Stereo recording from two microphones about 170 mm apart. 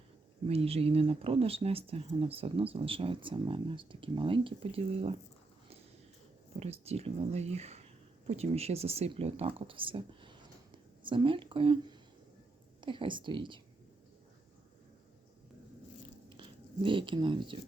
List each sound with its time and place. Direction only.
0.4 s speech: 35° right (ahead or behind)
6.6 s speech: 35° right (ahead or behind)
16.4 s speech: 30° right (ahead or behind)